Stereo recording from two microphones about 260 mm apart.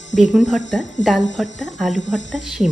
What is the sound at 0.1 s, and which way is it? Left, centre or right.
Speech, left.